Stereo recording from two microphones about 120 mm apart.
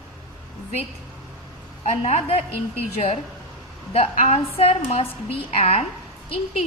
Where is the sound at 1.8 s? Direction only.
65° left (ahead or behind).